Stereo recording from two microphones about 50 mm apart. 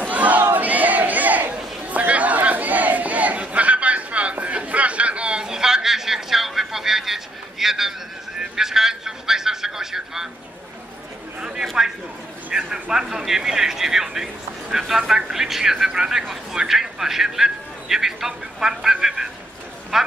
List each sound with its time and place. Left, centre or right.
0.1 s crowd: right; by 7.9 s centre
8.4 s a sound: centre
11.8 s speech: centre